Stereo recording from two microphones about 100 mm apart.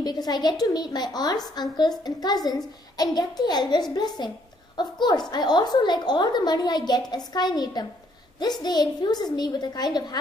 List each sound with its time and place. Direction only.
0.0 s a woman's voice: 40° left (ahead or behind)